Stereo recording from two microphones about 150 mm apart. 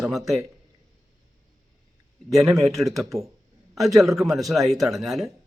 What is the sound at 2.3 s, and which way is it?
Speech, centre (ahead or behind).